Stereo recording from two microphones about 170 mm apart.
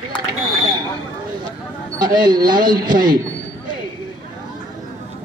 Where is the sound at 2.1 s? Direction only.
25° right (ahead or behind).